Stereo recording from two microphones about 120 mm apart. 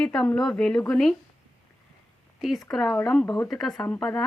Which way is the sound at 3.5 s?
Centre (ahead or behind).